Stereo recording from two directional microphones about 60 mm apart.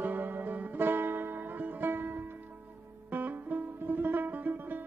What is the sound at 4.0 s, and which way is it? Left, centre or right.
Music, right.